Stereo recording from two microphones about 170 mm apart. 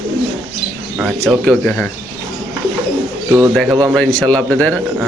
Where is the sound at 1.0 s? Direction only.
5° right (ahead or behind).